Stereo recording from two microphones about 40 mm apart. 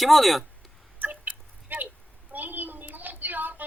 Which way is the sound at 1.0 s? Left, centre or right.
Right.